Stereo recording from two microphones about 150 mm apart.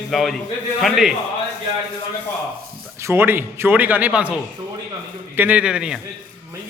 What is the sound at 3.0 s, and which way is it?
A man's voice, 15° right (ahead or behind).